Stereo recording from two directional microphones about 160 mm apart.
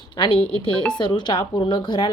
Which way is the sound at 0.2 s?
35° left (ahead or behind).